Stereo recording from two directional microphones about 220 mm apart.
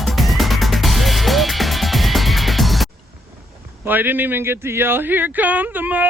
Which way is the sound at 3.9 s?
10° right (ahead or behind).